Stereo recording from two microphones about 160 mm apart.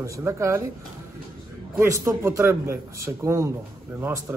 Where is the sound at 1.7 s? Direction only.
15° right (ahead or behind).